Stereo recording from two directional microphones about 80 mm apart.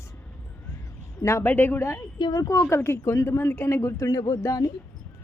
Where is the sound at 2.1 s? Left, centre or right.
Left.